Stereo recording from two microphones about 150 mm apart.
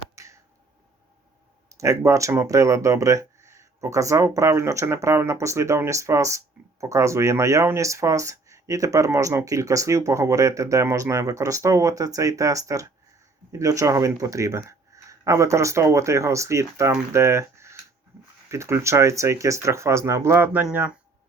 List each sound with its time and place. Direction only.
0.2 s finger snapping: 20° right (ahead or behind)
1.7 s speech: 20° right (ahead or behind)